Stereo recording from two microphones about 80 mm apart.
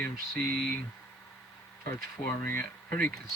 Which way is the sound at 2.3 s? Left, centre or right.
Left.